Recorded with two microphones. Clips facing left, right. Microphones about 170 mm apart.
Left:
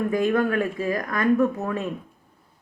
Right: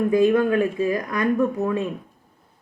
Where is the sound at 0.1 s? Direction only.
15° right (ahead or behind).